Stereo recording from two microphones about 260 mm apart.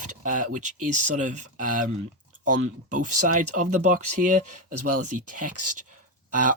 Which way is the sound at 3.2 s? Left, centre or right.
Right.